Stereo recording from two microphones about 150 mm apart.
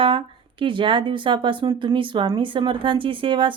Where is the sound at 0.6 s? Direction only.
35° right (ahead or behind).